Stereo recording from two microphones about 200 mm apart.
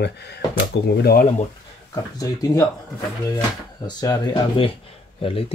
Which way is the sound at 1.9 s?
15° left (ahead or behind).